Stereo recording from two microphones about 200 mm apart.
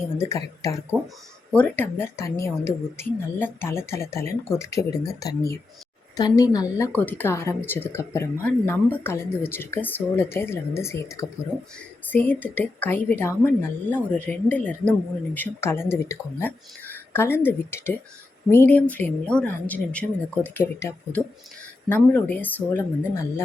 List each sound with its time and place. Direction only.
0.9 s a woman's voice: 10° left (ahead or behind)